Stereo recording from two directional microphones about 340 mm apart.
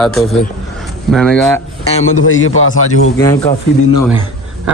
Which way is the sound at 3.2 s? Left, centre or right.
Centre.